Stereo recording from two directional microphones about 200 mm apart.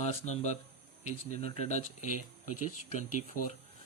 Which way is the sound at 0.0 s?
35° left (ahead or behind).